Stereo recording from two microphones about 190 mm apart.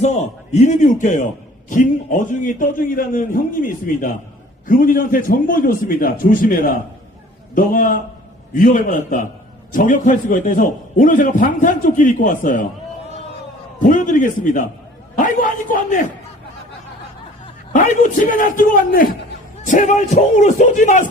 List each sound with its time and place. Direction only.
0.0 s a man's voice: 35° left (ahead or behind)
13.7 s a man's voice: 45° left (ahead or behind)
17.7 s a man's voice: 40° left (ahead or behind)